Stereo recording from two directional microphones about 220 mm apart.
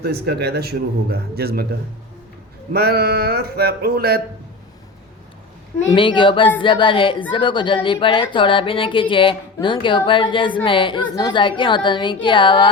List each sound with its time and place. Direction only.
0.0 s a man's voice: 45° right (ahead or behind)
2.7 s a man's voice: 45° right (ahead or behind)
5.9 s a woman's voice: 20° left (ahead or behind)